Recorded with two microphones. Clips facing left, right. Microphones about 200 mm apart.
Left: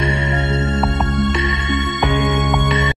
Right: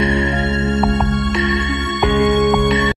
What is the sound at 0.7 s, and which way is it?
Music, centre (ahead or behind).